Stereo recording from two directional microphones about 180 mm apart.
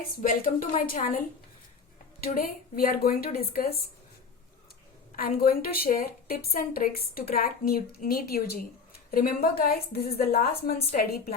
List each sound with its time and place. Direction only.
0.2 s speech: 50° left (ahead or behind)
2.2 s a woman's voice: 55° left (ahead or behind)
5.1 s a woman's voice: 55° left (ahead or behind)